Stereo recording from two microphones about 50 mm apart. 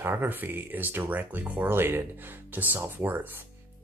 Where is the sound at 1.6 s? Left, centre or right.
Right.